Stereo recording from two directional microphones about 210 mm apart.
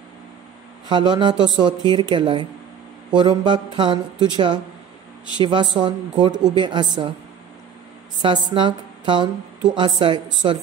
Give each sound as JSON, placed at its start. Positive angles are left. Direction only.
{"t": 0.8, "sound": "speech", "side_deg": -20}
{"t": 8.2, "sound": "speech", "side_deg": -20}